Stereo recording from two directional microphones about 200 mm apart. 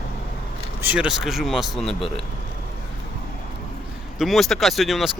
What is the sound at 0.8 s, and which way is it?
Speech, 5° right (ahead or behind).